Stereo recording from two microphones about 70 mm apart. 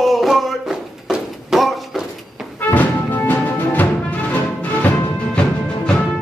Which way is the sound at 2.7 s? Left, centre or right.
Left.